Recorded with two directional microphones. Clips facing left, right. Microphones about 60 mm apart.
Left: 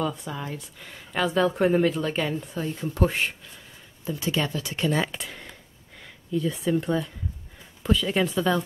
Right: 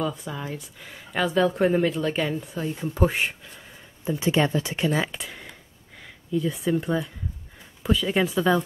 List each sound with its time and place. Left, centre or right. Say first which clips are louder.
0.0 s speech: even; centre
4.0 s speech: right 5 dB; right
4.9 s speech: even; centre